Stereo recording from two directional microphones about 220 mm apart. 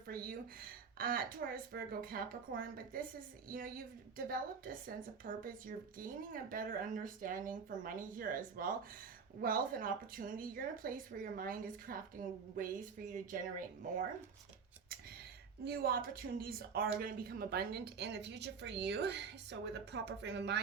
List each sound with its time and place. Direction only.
0.1 s speech: 40° right (ahead or behind)
15.6 s speech: 45° right (ahead or behind)